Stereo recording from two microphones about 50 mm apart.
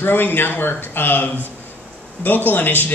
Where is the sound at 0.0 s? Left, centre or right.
Left.